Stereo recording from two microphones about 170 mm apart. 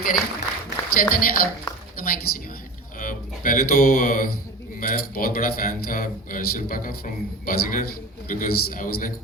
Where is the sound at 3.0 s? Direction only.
55° left (ahead or behind).